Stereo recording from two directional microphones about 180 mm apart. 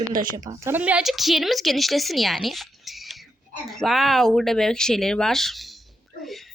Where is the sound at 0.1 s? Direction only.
50° right (ahead or behind).